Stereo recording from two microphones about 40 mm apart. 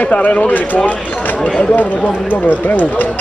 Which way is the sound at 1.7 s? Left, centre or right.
Left.